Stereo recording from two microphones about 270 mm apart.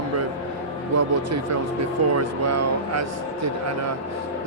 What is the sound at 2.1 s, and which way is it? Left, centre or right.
Speech, right.